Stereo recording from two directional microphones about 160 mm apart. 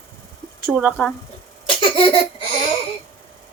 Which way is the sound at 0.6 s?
10° right (ahead or behind).